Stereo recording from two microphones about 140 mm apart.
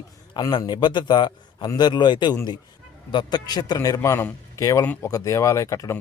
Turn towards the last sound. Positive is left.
turn(degrees=25)  # may be behind; listen again after turning